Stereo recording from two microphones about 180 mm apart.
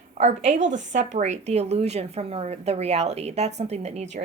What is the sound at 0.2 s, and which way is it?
Speech, 40° right (ahead or behind).